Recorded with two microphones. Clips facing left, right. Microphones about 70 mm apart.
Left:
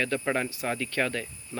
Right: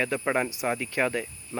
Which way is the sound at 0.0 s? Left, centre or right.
Centre.